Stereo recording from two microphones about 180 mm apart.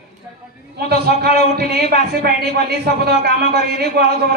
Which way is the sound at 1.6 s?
60° right (ahead or behind).